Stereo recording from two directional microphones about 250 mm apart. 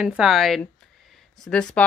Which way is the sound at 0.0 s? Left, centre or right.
Centre.